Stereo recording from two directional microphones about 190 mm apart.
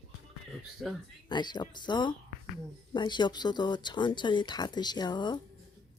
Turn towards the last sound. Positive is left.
turn(degrees=25)  # may be behind; listen again after turning